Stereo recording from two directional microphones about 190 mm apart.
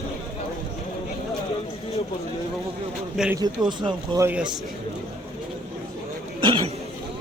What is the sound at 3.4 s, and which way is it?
Speech, 25° right (ahead or behind).